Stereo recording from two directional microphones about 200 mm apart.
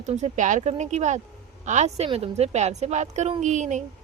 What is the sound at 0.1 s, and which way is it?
Speech, 35° right (ahead or behind).